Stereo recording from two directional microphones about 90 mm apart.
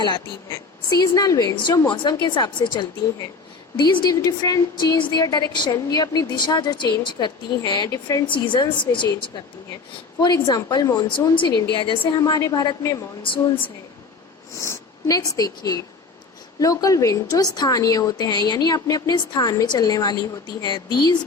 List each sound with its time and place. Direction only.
0.5 s a woman's voice: 45° left (ahead or behind)
1.9 s a woman's voice: 60° left (ahead or behind)
3.0 s a woman's voice: 50° left (ahead or behind)
4.1 s a woman's voice: 40° left (ahead or behind)
7.9 s a woman's voice: 40° left (ahead or behind)
8.3 s a woman's voice: 65° left (ahead or behind)
10.2 s a woman's voice: 60° left (ahead or behind)
11.3 s a woman's voice: 60° left (ahead or behind)
12.2 s a woman's voice: 45° left (ahead or behind)
14.5 s a woman's voice: 35° left (ahead or behind); by 21.2 s 50° left (ahead or behind)